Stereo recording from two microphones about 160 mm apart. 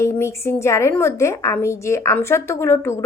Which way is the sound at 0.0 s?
15° left (ahead or behind).